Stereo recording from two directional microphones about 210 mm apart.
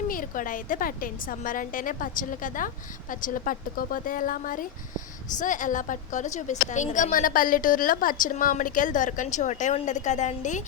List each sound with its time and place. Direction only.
0.1 s a woman's voice: 40° left (ahead or behind)